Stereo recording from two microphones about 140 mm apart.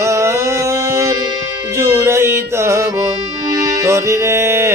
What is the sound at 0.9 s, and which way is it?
Music, 20° right (ahead or behind).